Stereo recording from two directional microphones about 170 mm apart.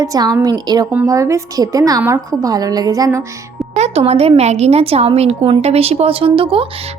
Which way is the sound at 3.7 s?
40° right (ahead or behind).